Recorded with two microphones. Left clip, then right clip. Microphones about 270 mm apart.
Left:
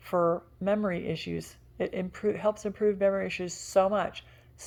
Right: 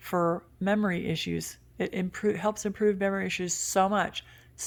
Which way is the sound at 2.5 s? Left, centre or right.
Right.